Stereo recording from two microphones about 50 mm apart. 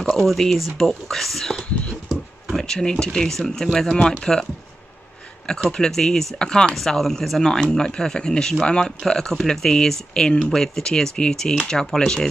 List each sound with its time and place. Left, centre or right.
0.1 s speech: centre
1.4 s whispering: centre
2.5 s speech: centre
3.9 s speech: centre
5.7 s speech: centre
6.7 s speech: centre